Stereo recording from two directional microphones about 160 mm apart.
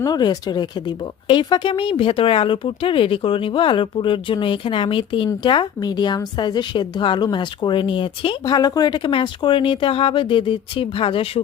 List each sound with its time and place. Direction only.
0.0 s speech: 25° left (ahead or behind)